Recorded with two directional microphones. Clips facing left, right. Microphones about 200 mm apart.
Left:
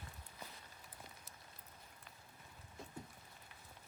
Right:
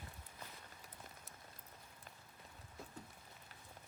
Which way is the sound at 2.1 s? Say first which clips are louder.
Right 2 dB; 45° right (ahead or behind).